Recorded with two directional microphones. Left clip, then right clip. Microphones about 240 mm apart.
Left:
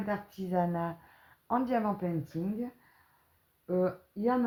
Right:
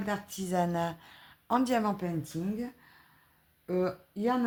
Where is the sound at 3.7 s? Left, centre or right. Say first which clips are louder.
Left 1 dB; right.